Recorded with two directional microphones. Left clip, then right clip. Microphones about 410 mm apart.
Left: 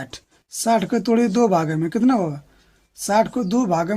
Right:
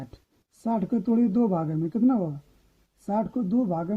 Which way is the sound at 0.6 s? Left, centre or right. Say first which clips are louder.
Left 9 dB; right.